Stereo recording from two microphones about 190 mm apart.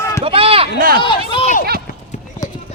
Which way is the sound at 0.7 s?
50° right (ahead or behind).